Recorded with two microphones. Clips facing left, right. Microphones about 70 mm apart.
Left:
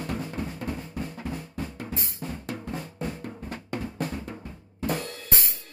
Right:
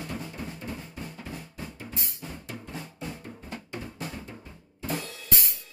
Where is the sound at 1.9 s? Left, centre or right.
Left.